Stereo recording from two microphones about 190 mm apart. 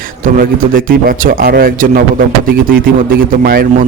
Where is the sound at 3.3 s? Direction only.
50° right (ahead or behind).